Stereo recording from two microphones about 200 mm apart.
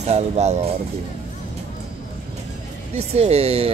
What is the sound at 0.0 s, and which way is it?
Speech, 35° right (ahead or behind).